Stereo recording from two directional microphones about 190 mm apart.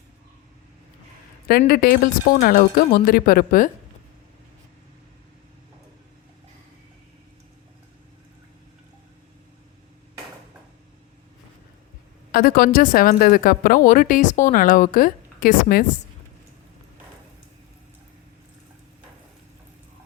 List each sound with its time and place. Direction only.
1.5 s speech: 55° left (ahead or behind)
12.3 s speech: 50° left (ahead or behind)